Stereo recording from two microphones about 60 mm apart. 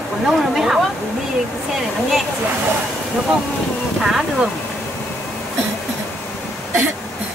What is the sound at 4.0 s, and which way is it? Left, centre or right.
Speech, centre.